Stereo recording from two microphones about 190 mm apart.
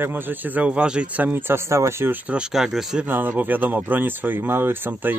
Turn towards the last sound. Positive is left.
turn(degrees=-10)  # may be behind; listen again after turning